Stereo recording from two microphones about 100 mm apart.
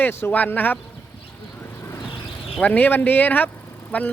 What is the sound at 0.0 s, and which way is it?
Speech, 20° left (ahead or behind).